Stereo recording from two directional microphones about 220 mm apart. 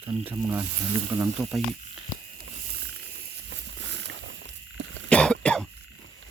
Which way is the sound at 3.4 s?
55° right (ahead or behind).